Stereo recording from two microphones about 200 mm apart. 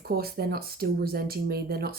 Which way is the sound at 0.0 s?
50° right (ahead or behind).